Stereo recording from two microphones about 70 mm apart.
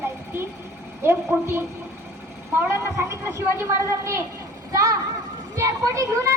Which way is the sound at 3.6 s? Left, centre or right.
Right.